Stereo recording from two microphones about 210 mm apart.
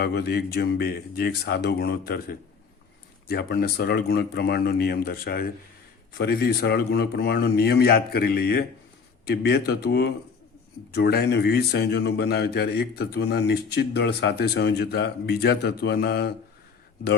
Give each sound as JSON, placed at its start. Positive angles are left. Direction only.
{"t": 0.0, "sound": "speech", "side_deg": 50}